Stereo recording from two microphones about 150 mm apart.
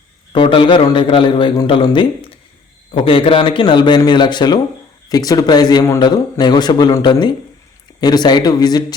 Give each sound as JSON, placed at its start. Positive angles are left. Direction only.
{"t": 0.3, "sound": "a man's voice", "side_deg": 35}